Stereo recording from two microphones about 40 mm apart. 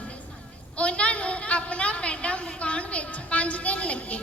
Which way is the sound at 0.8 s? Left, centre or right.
Left.